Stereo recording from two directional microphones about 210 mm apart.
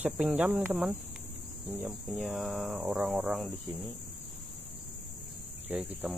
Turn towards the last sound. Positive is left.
turn(degrees=-5)  # may be behind; listen again after turning